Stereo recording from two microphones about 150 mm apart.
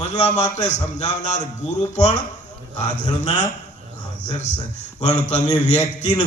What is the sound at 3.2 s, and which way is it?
A man's voice, 50° left (ahead or behind).